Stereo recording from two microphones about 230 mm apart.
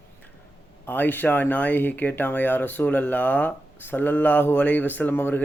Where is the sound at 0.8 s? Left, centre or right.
Centre.